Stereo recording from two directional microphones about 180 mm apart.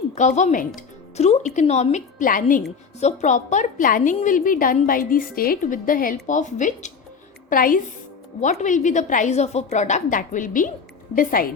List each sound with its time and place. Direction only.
0.1 s a woman's voice: 40° left (ahead or behind)